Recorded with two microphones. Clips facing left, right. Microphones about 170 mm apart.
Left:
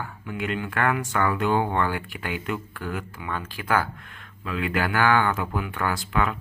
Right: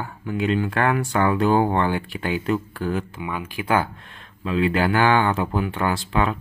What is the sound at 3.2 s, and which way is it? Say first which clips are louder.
Speech: right 3 dB; 15° right (ahead or behind).